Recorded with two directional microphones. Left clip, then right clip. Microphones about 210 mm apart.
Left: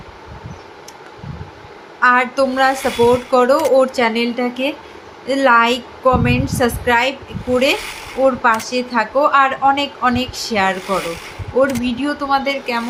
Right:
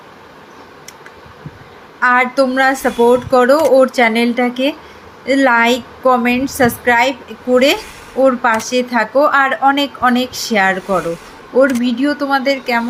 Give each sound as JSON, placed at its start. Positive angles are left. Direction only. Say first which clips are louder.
{"t": 2.0, "sound": "a woman's voice", "louder": "right 1 dB", "side_deg": -15}